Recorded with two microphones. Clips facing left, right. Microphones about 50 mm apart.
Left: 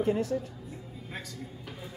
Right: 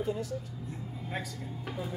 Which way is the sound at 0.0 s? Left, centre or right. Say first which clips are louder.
Left 6 dB; left.